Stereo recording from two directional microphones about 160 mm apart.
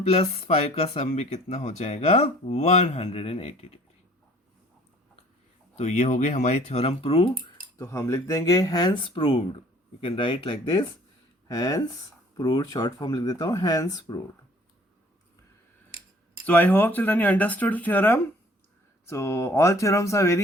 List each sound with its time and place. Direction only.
0.0 s speech: 40° left (ahead or behind)
5.7 s speech: 45° left (ahead or behind)
7.3 s speech: 20° left (ahead or behind)
16.5 s speech: 10° left (ahead or behind)